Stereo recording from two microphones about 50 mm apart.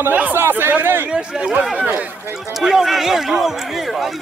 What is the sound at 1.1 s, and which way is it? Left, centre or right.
Speech, centre.